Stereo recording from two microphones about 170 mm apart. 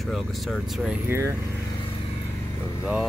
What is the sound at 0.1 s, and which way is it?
Vehicle, centre (ahead or behind).